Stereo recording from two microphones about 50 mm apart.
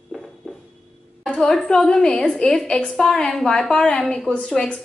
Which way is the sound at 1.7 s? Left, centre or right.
Centre.